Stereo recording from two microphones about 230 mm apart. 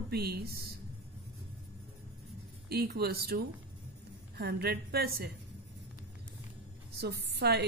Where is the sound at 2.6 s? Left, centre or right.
Right.